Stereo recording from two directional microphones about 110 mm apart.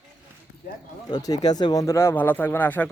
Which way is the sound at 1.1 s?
35° left (ahead or behind).